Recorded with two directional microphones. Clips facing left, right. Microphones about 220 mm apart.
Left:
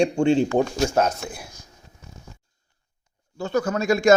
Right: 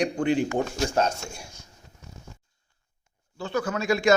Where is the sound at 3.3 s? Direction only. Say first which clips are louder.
Left 4 dB; 45° left (ahead or behind).